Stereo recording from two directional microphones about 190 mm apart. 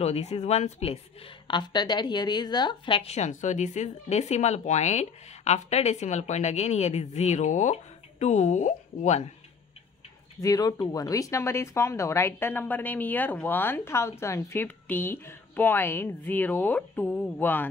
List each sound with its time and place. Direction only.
0.0 s a woman's voice: 35° left (ahead or behind)
1.5 s a woman's voice: 25° left (ahead or behind)
10.4 s speech: 20° left (ahead or behind)